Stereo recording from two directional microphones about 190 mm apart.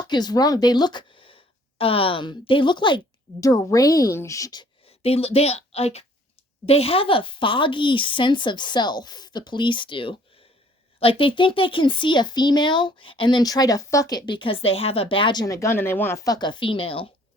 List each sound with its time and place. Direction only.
0.1 s speech: 20° left (ahead or behind)